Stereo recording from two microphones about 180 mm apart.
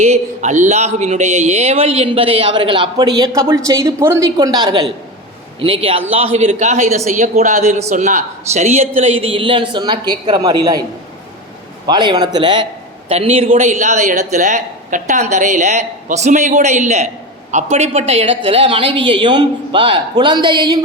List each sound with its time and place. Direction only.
0.0 s a woman's voice: 40° right (ahead or behind); by 10.8 s 20° right (ahead or behind)
11.9 s a woman's voice: 25° right (ahead or behind)